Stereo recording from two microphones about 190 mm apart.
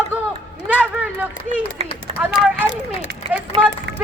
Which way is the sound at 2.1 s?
35° right (ahead or behind).